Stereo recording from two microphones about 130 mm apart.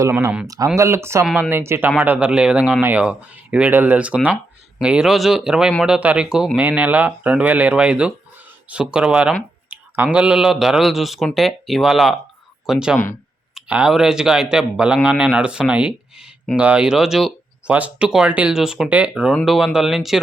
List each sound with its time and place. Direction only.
0.0 s a man's voice: 25° right (ahead or behind); by 20.1 s centre (ahead or behind)